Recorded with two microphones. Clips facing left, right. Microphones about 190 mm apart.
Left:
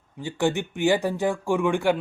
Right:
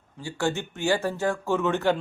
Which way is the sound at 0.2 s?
20° left (ahead or behind).